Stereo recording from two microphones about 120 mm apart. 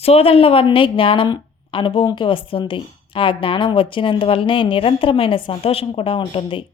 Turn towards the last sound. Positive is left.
turn(degrees=50)  # may be behind; listen again after turning